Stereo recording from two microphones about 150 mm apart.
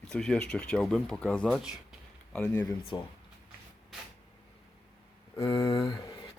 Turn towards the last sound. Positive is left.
turn(degrees=25)  # may be behind; listen again after turning